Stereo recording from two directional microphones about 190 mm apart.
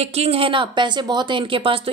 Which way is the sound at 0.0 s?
35° right (ahead or behind).